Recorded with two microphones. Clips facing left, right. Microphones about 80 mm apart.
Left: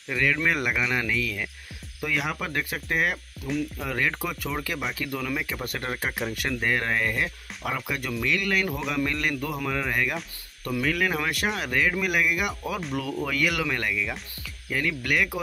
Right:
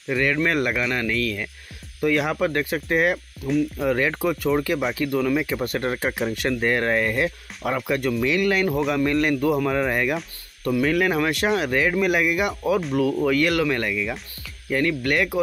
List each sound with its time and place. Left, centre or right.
0.1 s speech: centre